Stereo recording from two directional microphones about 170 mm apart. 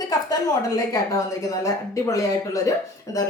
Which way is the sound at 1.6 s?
20° left (ahead or behind).